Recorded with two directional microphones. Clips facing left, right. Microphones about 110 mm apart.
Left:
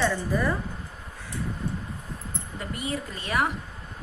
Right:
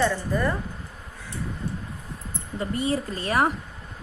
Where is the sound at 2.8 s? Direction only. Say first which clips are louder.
Right 7 dB; 35° right (ahead or behind).